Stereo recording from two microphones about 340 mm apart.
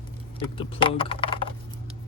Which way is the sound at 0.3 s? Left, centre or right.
Centre.